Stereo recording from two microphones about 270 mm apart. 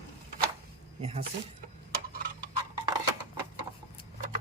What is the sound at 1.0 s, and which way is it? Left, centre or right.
Speech, right.